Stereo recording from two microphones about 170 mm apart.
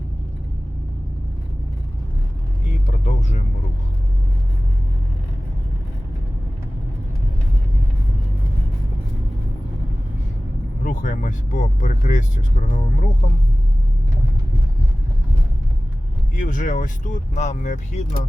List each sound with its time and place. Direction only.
3.0 s vehicle: 50° left (ahead or behind)
10.8 s speech: 50° left (ahead or behind)
16.4 s speech: 50° left (ahead or behind)